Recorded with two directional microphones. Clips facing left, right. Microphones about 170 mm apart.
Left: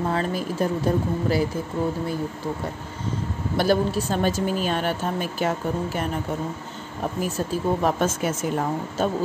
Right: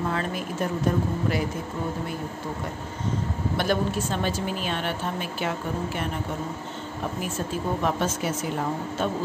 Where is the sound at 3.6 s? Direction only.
35° left (ahead or behind).